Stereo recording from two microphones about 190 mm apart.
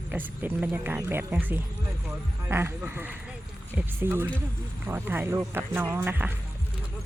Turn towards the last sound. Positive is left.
turn(degrees=-10)  # may be behind; listen again after turning